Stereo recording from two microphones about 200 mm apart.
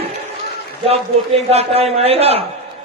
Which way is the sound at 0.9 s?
30° right (ahead or behind).